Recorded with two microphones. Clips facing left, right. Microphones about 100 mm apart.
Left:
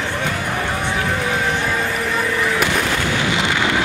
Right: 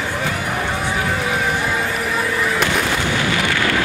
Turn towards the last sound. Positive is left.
turn(degrees=20)  # may be behind; listen again after turning